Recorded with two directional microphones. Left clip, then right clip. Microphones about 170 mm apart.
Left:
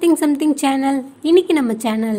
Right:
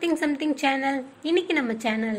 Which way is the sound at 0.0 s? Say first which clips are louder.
Left 9 dB; 35° left (ahead or behind).